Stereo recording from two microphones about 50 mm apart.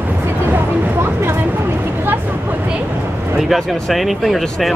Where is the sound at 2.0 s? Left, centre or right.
Right.